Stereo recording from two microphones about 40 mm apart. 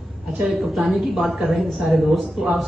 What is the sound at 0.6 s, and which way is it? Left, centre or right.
A man's voice, centre.